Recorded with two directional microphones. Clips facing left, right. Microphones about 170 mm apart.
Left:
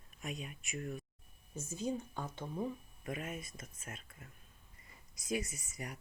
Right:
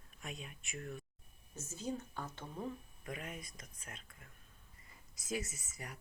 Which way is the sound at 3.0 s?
25° left (ahead or behind).